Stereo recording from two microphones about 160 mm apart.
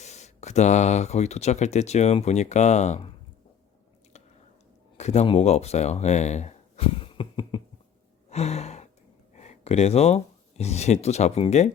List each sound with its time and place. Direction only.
0.0 s speech: 45° left (ahead or behind)
4.9 s speech: 45° left (ahead or behind)
8.3 s gasp: 40° left (ahead or behind)
9.3 s a sound: 45° left (ahead or behind)
10.6 s speech: 45° left (ahead or behind)